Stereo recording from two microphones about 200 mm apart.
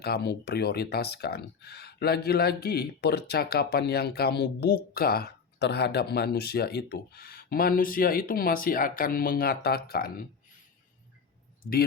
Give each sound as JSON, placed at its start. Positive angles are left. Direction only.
{"t": 0.0, "sound": "speech", "side_deg": 55}
{"t": 11.6, "sound": "speech", "side_deg": 50}